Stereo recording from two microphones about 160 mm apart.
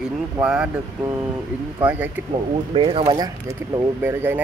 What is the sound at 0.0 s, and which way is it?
Speech, 5° right (ahead or behind).